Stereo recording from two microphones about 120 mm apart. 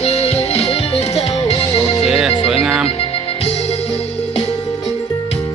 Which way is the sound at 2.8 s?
50° left (ahead or behind).